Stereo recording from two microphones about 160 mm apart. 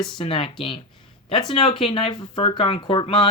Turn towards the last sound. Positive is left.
turn(degrees=35)  # may be behind; listen again after turning